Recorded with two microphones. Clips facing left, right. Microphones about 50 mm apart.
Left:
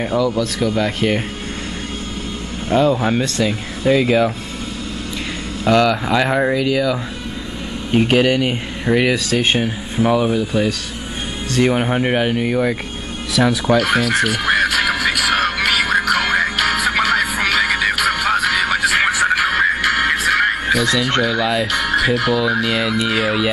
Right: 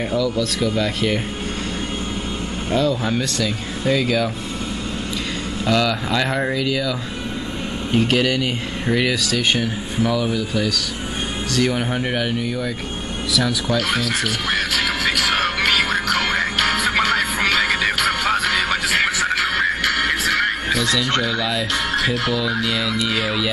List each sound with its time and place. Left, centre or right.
0.1 s speech: left
2.7 s speech: left
5.7 s speech: left
9.1 s speech: left
13.7 s speech: centre
14.2 s music: centre
21.2 s speech: centre